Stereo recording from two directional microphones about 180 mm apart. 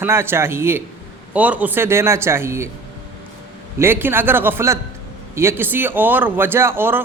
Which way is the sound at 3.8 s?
10° right (ahead or behind).